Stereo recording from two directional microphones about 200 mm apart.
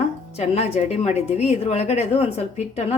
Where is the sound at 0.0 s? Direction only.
35° left (ahead or behind).